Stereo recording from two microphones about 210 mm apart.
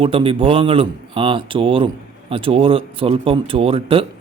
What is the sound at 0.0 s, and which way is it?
A man's voice, 25° right (ahead or behind).